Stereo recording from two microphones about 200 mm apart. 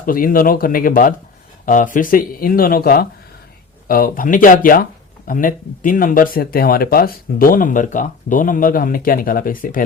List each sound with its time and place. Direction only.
0.0 s speech: 45° left (ahead or behind)